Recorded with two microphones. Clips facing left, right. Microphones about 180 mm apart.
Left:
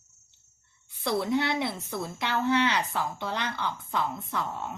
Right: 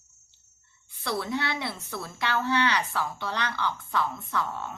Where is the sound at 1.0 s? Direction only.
20° left (ahead or behind).